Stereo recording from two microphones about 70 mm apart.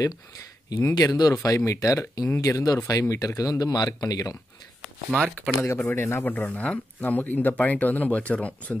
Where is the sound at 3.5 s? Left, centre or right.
Left.